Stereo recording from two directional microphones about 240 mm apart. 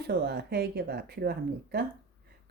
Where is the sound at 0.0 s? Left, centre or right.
Right.